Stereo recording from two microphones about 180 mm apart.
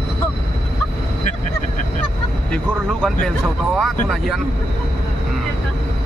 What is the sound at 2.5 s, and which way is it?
Speech, 5° left (ahead or behind).